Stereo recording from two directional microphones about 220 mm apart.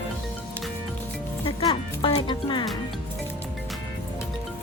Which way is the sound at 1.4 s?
25° left (ahead or behind).